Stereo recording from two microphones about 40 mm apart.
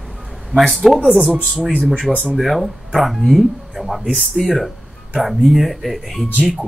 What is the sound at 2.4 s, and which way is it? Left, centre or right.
Speech, centre.